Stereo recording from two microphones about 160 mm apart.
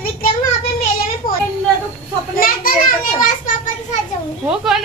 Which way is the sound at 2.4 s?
60° left (ahead or behind).